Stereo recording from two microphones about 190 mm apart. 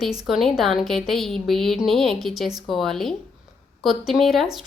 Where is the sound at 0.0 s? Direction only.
Centre (ahead or behind).